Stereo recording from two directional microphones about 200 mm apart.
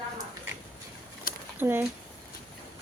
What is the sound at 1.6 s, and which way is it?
Speech, 10° right (ahead or behind).